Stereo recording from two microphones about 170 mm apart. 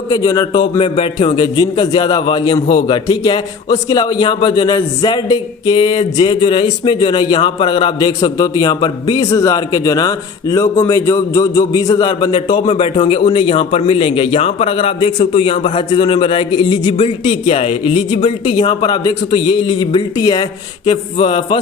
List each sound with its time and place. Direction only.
0.1 s a man's voice: 20° left (ahead or behind)
1.5 s a man's voice: 25° left (ahead or behind)